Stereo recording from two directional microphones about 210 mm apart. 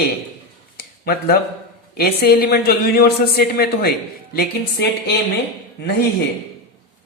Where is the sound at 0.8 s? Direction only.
45° left (ahead or behind).